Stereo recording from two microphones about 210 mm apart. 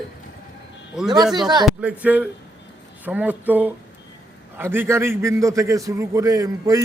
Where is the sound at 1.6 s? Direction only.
5° right (ahead or behind).